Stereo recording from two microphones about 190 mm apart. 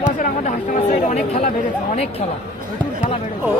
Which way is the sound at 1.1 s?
40° left (ahead or behind).